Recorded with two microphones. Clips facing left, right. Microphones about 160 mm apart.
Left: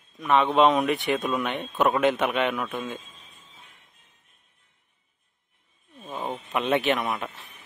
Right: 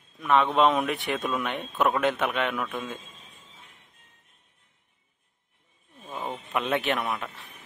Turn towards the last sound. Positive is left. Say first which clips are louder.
# left 2 dB
turn(degrees=0)  # may be behind; listen again after turning